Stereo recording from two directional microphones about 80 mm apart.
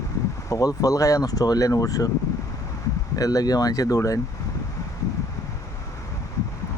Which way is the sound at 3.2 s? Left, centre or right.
Left.